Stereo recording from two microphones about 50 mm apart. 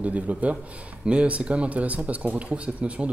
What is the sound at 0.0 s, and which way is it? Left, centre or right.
Speech, right.